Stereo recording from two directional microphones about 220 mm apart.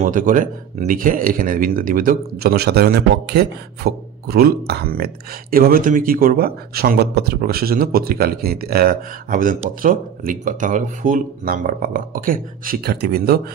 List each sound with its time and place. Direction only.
0.0 s speech: 35° right (ahead or behind)